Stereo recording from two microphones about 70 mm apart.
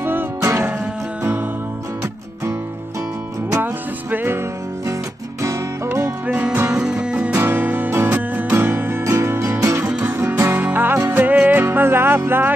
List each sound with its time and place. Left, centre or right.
0.0 s music: right
3.6 s music: right
5.9 s music: right
6.2 s music: right
7.3 s music: right
9.8 s music: centre
10.4 s music: right
11.2 s music: right